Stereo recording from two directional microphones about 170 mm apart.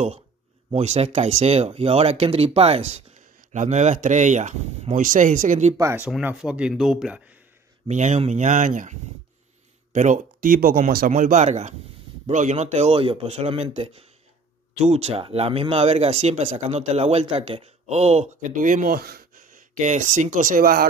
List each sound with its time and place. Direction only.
0.7 s speech: 40° right (ahead or behind)
5.8 s speech: 10° right (ahead or behind)
7.9 s speech: 45° right (ahead or behind)
9.9 s speech: 45° right (ahead or behind)